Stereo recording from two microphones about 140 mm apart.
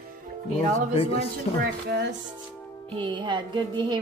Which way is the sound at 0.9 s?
45° left (ahead or behind).